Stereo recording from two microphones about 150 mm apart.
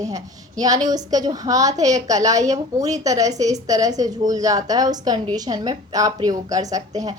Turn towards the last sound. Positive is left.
turn(degrees=-25)  # may be behind; listen again after turning